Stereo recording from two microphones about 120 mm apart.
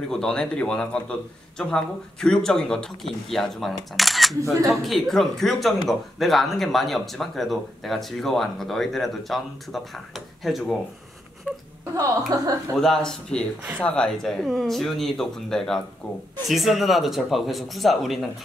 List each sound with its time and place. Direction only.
0.1 s speech: 5° left (ahead or behind)
12.3 s speech: 35° right (ahead or behind)
12.7 s speech: 5° left (ahead or behind)